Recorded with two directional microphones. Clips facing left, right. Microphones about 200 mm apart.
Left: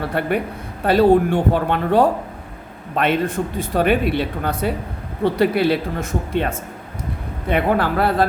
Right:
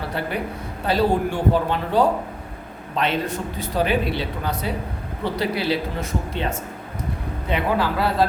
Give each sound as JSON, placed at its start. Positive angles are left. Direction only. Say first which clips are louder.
{"t": 0.2, "sound": "speech", "louder": "left 6 dB", "side_deg": 55}